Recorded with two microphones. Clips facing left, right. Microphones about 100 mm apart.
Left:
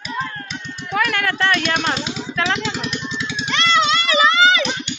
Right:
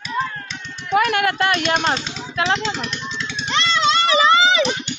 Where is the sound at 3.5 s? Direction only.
30° right (ahead or behind).